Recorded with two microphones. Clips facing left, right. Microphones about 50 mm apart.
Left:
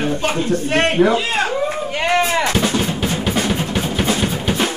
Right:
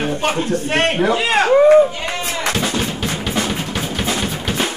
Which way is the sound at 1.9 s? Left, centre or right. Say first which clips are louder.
Left 7 dB; left.